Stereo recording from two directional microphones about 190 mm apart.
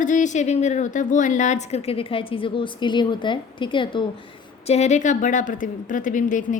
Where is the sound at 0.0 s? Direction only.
40° left (ahead or behind).